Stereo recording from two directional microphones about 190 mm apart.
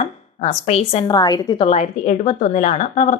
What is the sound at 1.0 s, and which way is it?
Speech, 20° left (ahead or behind).